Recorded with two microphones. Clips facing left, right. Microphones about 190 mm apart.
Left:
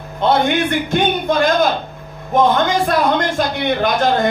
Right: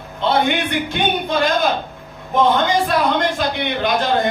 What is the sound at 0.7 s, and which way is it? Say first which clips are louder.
Speech: left 4 dB; 50° left (ahead or behind).